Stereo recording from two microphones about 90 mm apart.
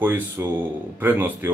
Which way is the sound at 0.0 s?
20° right (ahead or behind).